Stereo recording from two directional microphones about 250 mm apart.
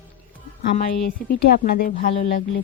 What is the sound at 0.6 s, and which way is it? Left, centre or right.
Speech, left.